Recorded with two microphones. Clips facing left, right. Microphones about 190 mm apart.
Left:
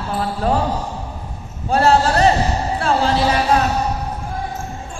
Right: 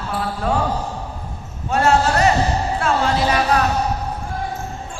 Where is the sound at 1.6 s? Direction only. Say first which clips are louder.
Left 2 dB; 35° left (ahead or behind).